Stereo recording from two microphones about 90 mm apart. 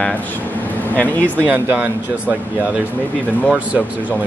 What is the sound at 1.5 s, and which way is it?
Speech, 20° right (ahead or behind).